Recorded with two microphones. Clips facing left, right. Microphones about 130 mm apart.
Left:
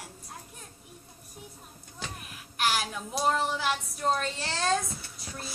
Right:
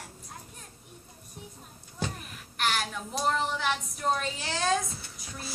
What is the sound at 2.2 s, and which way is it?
Child singing, 5° left (ahead or behind).